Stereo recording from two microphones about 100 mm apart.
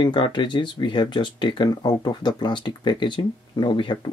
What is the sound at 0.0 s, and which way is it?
Speech, 50° left (ahead or behind).